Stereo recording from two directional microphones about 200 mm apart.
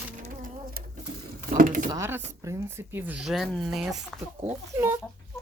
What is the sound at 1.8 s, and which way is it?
Speech, 15° right (ahead or behind).